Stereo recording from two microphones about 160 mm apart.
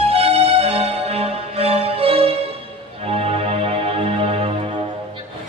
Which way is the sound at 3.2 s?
40° right (ahead or behind).